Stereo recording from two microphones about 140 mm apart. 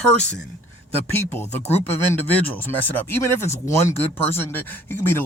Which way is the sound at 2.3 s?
15° left (ahead or behind).